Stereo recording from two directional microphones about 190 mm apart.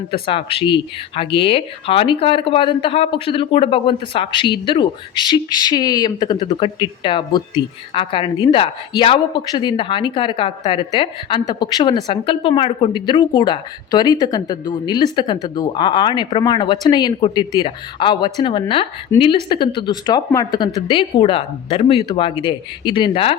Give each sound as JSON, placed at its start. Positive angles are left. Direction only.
{"t": 0.1, "sound": "speech", "side_deg": 30}